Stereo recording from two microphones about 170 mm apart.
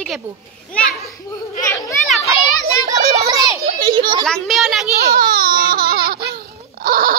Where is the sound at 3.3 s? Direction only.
20° right (ahead or behind).